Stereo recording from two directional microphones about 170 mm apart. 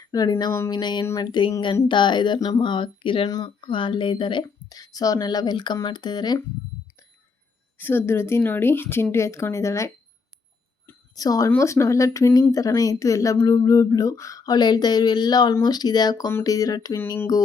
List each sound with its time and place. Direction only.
0.0 s speech: 20° left (ahead or behind)
7.8 s a woman's voice: 15° left (ahead or behind)